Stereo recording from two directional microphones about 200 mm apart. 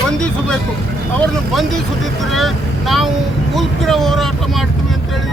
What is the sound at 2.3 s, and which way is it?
Speech, centre (ahead or behind).